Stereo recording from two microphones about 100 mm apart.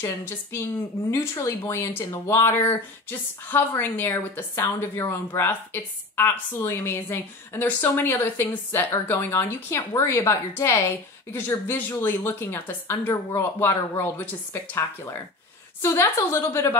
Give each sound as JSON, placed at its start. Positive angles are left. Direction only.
{"t": 0.0, "sound": "a woman's voice", "side_deg": 25}